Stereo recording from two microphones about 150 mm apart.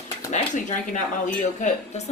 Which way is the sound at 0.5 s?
55° left (ahead or behind).